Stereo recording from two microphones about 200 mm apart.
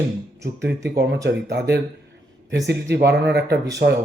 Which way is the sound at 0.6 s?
60° right (ahead or behind).